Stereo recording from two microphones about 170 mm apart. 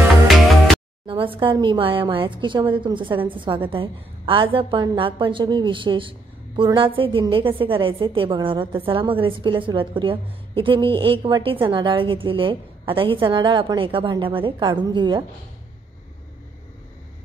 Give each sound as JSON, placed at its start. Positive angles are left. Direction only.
{"t": 1.0, "sound": "a woman's voice", "side_deg": -30}